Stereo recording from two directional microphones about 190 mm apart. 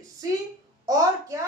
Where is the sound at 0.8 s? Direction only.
15° right (ahead or behind).